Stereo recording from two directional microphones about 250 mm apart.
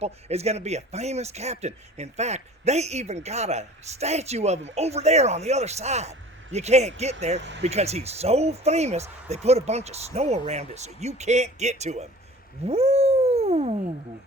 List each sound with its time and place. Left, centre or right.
0.0 s speech: right
7.3 s speech: right
7.6 s speech: right
12.6 s a sound: right